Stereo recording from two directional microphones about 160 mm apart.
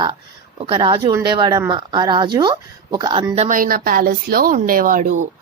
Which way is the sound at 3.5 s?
60° right (ahead or behind).